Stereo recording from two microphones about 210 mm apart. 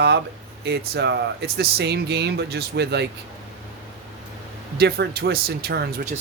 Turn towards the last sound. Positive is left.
turn(degrees=-50)  # may be behind; listen again after turning